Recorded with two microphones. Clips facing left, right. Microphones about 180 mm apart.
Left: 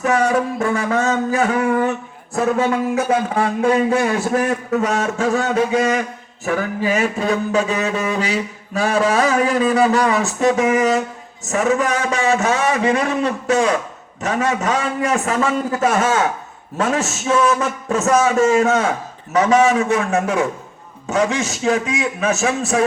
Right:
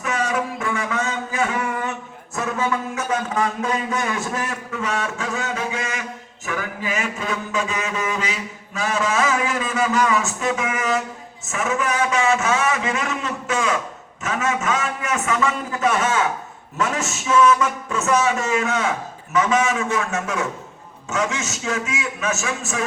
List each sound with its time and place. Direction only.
0.2 s a man's voice: 35° left (ahead or behind)